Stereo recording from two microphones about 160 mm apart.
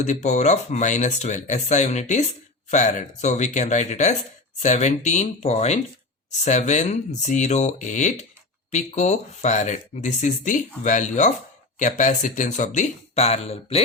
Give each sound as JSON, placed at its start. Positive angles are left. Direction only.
{"t": 0.0, "sound": "speech", "side_deg": 45}